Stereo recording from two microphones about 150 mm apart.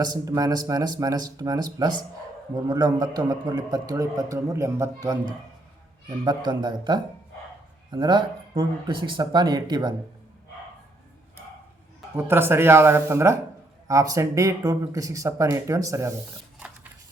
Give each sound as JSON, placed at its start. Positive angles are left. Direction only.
{"t": 0.0, "sound": "a man's voice", "side_deg": -25}
{"t": 12.1, "sound": "a man's voice", "side_deg": -15}